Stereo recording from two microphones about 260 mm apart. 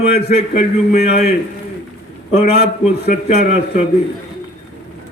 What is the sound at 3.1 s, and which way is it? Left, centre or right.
Speech, left.